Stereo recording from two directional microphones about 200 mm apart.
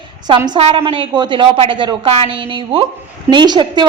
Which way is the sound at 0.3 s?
20° right (ahead or behind).